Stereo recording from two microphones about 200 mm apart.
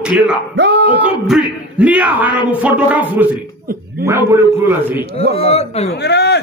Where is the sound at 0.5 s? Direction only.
60° right (ahead or behind).